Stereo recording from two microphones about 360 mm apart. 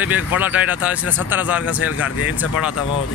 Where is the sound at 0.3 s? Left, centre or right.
Centre.